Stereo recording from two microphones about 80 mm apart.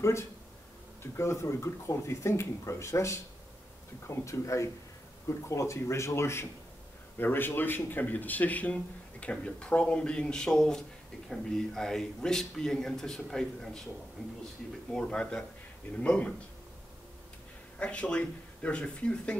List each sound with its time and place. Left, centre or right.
0.0 s speech: left; by 13.8 s centre
14.9 s speech: centre
17.7 s speech: centre